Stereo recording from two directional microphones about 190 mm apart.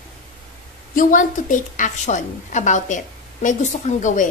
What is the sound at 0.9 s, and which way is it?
A woman's voice, 45° left (ahead or behind).